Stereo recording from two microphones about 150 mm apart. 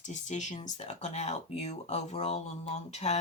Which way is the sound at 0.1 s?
55° left (ahead or behind).